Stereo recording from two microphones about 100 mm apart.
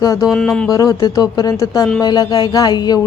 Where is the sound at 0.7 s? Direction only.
35° left (ahead or behind).